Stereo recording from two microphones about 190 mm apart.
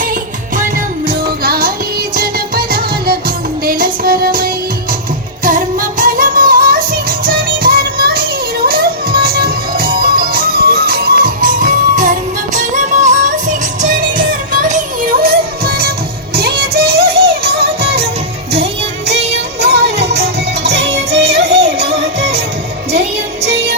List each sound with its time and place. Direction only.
0.0 s music: 45° right (ahead or behind)
12.5 s music: 40° right (ahead or behind)
17.7 s music: 30° right (ahead or behind)
19.3 s music: 60° right (ahead or behind)
20.8 s music: 35° right (ahead or behind)
21.7 s music: 60° right (ahead or behind)